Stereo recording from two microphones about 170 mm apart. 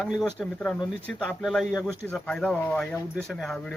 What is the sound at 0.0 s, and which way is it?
Speech, centre (ahead or behind).